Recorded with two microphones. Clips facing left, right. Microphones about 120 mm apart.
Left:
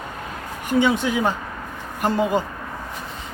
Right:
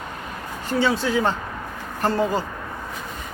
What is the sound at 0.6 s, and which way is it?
Speech, 15° left (ahead or behind).